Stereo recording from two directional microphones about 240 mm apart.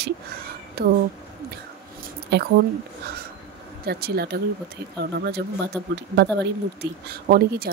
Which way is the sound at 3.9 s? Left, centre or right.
Right.